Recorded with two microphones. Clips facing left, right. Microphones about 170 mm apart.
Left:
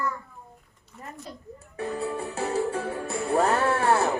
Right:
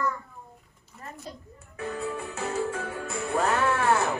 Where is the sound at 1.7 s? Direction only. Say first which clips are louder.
Left 2 dB; 35° left (ahead or behind).